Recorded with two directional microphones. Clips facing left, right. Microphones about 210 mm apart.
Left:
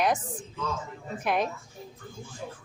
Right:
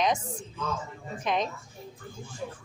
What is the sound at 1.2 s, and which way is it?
Speech, 10° left (ahead or behind).